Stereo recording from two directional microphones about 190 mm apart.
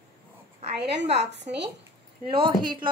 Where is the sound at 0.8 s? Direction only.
65° right (ahead or behind).